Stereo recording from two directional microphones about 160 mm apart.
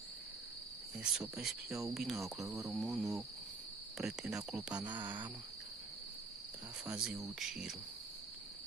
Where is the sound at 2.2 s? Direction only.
20° right (ahead or behind).